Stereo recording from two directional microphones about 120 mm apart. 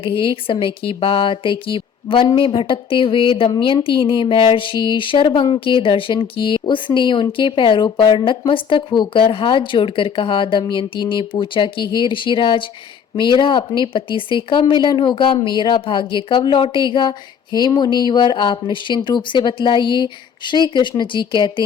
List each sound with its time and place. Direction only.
0.0 s speech: 50° left (ahead or behind)